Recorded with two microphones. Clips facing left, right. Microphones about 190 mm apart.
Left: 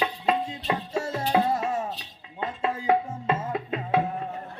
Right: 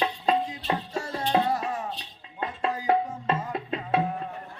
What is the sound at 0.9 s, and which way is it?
Music, 25° left (ahead or behind).